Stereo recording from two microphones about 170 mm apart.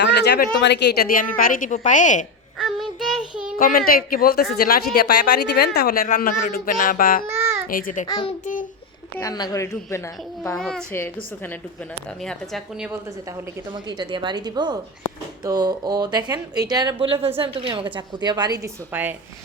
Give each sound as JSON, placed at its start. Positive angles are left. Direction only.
{"t": 0.0, "sound": "a woman's voice", "side_deg": 80}
{"t": 2.6, "sound": "child singing", "side_deg": 0}
{"t": 3.6, "sound": "speech", "side_deg": 60}
{"t": 8.0, "sound": "a man's voice", "side_deg": 25}
{"t": 10.6, "sound": "a woman's voice", "side_deg": 5}
{"t": 12.2, "sound": "a woman's voice", "side_deg": 5}
{"t": 13.7, "sound": "a woman's voice", "side_deg": -25}